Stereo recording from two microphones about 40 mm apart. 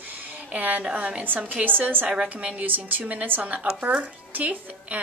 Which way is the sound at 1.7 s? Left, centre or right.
Right.